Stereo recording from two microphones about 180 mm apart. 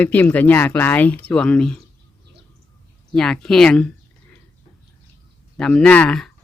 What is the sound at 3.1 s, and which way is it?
Speech, 5° left (ahead or behind).